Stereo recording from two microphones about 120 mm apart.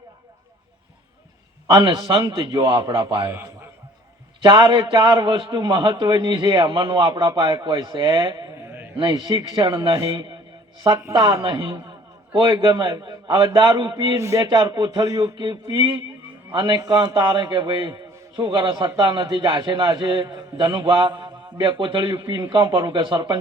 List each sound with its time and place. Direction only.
1.6 s a man's voice: 40° right (ahead or behind)
3.2 s a man's voice: 20° right (ahead or behind)
4.4 s a man's voice: 40° right (ahead or behind)
8.6 s a sound: 20° right (ahead or behind)
9.0 s a man's voice: 40° right (ahead or behind)
12.3 s a man's voice: 45° right (ahead or behind)